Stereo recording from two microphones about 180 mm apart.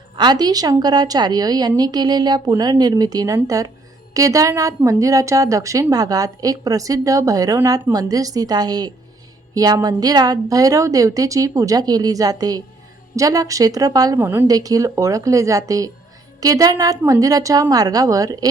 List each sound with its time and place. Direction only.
0.2 s a woman's voice: 25° right (ahead or behind)